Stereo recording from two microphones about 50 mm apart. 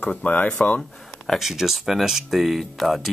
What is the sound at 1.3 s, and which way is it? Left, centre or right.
Speech, centre.